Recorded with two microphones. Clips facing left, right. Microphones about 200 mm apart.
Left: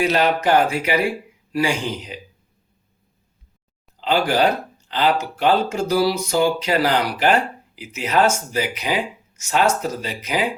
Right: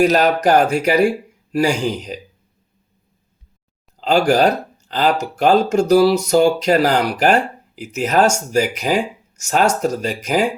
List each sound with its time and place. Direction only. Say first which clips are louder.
0.0 s speech: right 4 dB; 40° right (ahead or behind)
4.0 s speech: right 4 dB; 45° right (ahead or behind)